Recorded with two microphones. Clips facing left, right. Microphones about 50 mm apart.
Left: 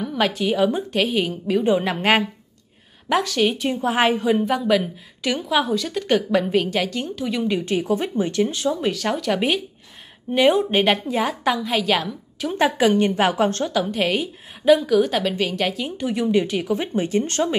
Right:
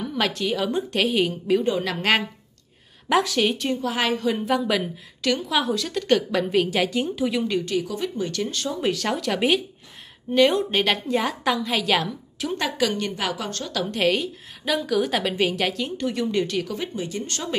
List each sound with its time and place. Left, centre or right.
0.0 s a woman's voice: centre
1.6 s a woman's voice: centre
3.1 s a woman's voice: centre
3.7 s speech: left
4.4 s a woman's voice: centre
7.6 s speech: left
8.8 s a woman's voice: centre
10.3 s a woman's voice: centre
12.5 s a woman's voice: left
13.7 s a woman's voice: centre
16.7 s a woman's voice: left